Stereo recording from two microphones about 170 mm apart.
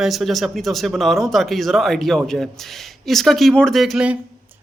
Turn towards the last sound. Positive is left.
turn(degrees=-5)  # may be behind; listen again after turning